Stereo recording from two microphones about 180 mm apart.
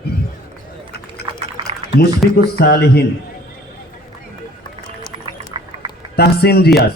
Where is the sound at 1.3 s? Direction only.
30° right (ahead or behind).